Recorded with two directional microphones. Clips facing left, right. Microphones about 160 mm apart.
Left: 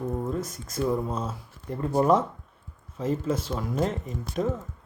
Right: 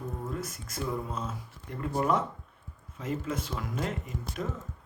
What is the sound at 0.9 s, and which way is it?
Speech, 35° left (ahead or behind).